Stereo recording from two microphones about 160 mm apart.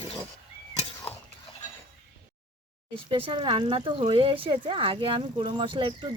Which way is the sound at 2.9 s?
35° right (ahead or behind).